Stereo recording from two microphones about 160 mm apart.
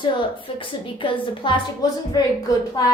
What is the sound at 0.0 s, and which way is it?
A woman's voice, 30° left (ahead or behind).